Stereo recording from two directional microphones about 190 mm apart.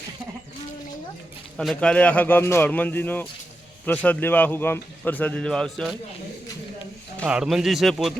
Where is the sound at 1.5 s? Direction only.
Centre (ahead or behind).